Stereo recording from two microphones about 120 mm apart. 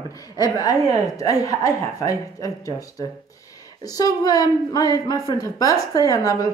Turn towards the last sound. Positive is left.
turn(degrees=30)  # may be behind; listen again after turning